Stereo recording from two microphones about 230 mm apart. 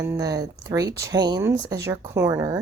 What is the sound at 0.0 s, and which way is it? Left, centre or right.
Speech, centre.